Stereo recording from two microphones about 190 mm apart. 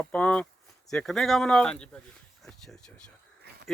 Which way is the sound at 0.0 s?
5° left (ahead or behind).